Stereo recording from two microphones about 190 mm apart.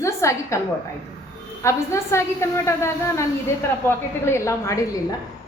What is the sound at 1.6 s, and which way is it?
A woman's voice, 15° left (ahead or behind).